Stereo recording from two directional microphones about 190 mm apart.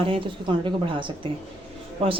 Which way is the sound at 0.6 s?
25° right (ahead or behind).